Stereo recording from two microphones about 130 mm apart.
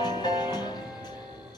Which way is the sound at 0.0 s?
35° left (ahead or behind).